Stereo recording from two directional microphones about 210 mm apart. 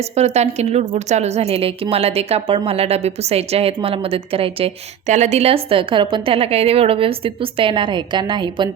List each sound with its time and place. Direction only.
0.2 s a woman's voice: 30° right (ahead or behind)